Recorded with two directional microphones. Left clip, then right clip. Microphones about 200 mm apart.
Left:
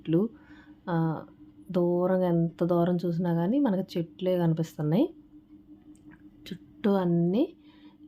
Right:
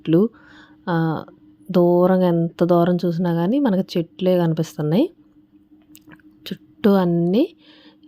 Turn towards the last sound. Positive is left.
turn(degrees=-40)  # may be behind; listen again after turning